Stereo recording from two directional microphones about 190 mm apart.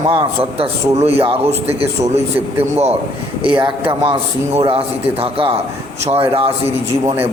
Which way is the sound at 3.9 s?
25° right (ahead or behind).